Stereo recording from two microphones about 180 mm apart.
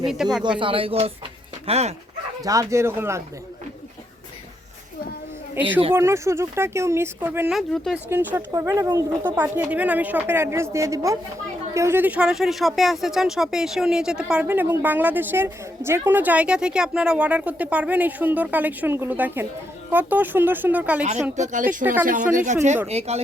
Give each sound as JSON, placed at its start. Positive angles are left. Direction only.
{"t": 0.0, "sound": "speech", "side_deg": -5}
{"t": 0.6, "sound": "speech", "side_deg": -30}
{"t": 2.4, "sound": "speech", "side_deg": -20}
{"t": 5.5, "sound": "speech", "side_deg": -10}
{"t": 7.5, "sound": "speech", "side_deg": 0}
{"t": 21.3, "sound": "speech", "side_deg": -45}